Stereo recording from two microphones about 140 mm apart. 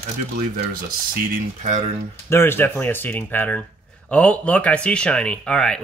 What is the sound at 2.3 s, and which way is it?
Speech, 15° left (ahead or behind).